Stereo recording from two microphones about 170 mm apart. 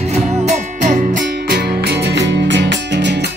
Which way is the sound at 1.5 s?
80° right.